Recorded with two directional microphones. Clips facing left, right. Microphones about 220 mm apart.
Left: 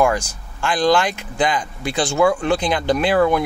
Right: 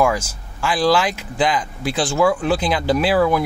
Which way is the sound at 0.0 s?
Centre (ahead or behind).